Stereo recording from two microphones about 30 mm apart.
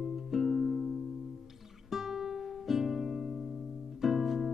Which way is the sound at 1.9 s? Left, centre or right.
Centre.